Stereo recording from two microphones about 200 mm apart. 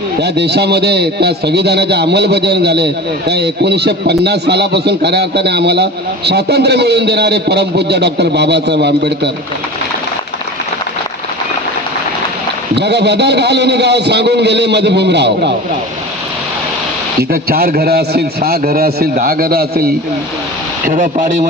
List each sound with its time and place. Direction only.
0.2 s a man's voice: 55° right (ahead or behind)
12.7 s a man's voice: 55° right (ahead or behind)
17.3 s a man's voice: 50° right (ahead or behind)